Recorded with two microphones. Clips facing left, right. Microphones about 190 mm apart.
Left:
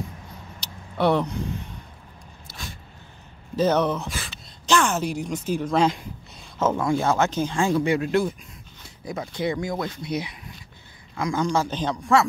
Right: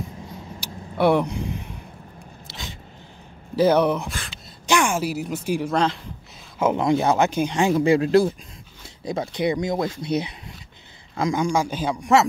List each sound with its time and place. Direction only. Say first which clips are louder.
0.6 s vehicle: right 3 dB; 10° right (ahead or behind)
2.4 s a sound: right 1 dB; 90° right
3.5 s speech: right 3 dB; 10° right (ahead or behind)
7.8 s speech: right 5 dB; 30° right (ahead or behind)
9.3 s speech: right 3 dB; 15° right (ahead or behind)
11.3 s speech: left 1 dB; 10° right (ahead or behind)